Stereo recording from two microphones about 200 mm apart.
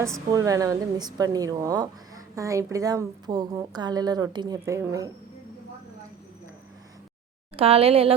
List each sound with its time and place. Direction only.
0.3 s speech: 15° right (ahead or behind)
7.5 s a woman's voice: 30° right (ahead or behind)